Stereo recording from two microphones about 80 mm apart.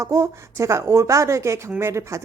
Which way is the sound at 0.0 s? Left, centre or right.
Right.